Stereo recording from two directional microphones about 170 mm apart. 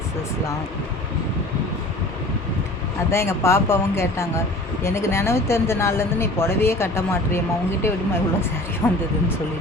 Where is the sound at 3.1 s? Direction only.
15° left (ahead or behind).